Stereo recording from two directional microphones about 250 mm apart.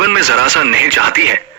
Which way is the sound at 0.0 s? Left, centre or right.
Right.